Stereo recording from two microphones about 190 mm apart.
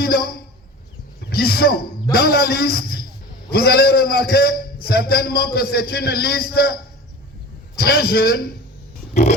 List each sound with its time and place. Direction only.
0.0 s a sound: 55° left (ahead or behind)
2.1 s a man's voice: 55° left (ahead or behind)
7.8 s a man's voice: 55° left (ahead or behind)